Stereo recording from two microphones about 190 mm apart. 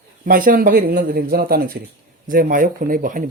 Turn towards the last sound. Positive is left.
turn(degrees=-45)  # may be behind; listen again after turning